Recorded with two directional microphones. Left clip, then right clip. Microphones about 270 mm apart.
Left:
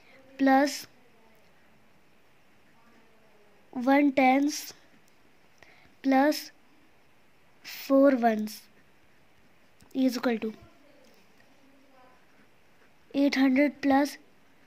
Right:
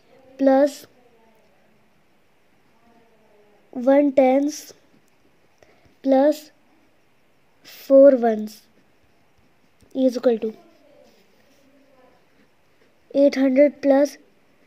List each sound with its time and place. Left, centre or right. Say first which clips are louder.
0.4 s speech: right 6 dB; centre
3.7 s speech: right 7 dB; centre
5.6 s a sound: right 5 dB; centre
7.6 s speech: right 10 dB; centre
9.9 s speech: right 9 dB; centre
13.1 s speech: right 8 dB; centre